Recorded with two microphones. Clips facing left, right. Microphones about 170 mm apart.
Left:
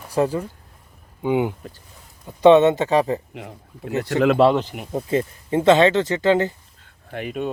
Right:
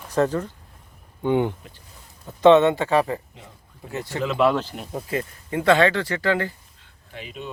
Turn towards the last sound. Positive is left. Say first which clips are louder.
# left 9 dB
turn(degrees=55)  # may be behind; listen again after turning